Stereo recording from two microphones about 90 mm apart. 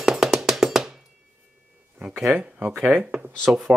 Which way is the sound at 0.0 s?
5° right (ahead or behind).